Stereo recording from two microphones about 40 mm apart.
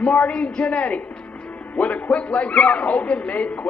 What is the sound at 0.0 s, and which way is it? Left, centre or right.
A man's voice, left.